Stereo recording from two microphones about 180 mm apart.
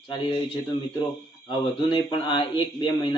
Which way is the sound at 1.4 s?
30° left (ahead or behind).